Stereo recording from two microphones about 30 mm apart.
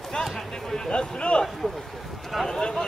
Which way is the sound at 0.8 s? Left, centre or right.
Left.